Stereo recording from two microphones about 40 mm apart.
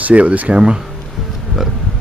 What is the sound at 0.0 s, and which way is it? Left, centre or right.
Speech, right.